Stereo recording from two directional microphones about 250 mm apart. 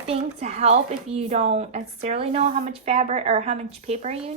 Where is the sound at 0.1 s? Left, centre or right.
Right.